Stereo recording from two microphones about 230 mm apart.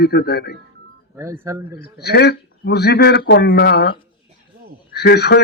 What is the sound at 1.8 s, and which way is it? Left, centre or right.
Speech, left.